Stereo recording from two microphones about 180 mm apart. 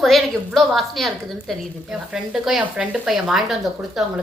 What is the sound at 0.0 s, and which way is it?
A woman's voice, centre (ahead or behind).